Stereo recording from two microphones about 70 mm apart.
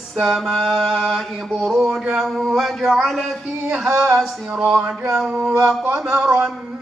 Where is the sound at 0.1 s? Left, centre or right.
Centre.